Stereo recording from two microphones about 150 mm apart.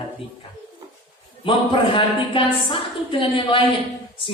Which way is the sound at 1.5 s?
35° left (ahead or behind).